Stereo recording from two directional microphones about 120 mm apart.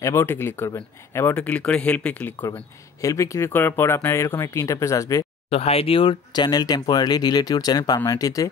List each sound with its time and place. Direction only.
0.0 s speech: 20° left (ahead or behind)
3.0 s speech: 25° left (ahead or behind)
5.5 s speech: 55° left (ahead or behind); by 8.5 s 30° left (ahead or behind)